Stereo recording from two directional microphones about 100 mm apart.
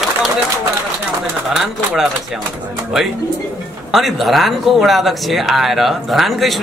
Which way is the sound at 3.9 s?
Centre (ahead or behind).